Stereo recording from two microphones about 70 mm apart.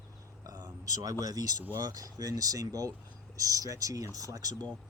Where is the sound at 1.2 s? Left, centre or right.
Right.